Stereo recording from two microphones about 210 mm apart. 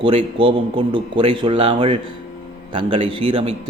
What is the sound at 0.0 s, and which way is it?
Speech, 25° right (ahead or behind).